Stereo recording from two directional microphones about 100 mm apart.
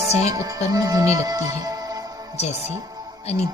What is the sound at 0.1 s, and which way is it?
Music, 90° left.